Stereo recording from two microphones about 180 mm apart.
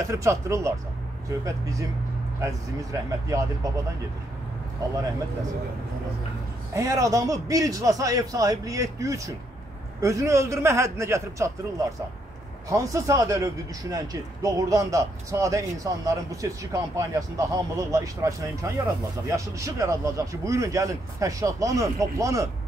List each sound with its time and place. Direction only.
0.0 s a man's voice: 15° right (ahead or behind)
6.7 s a man's voice: 20° right (ahead or behind)
12.6 s speech: 15° right (ahead or behind)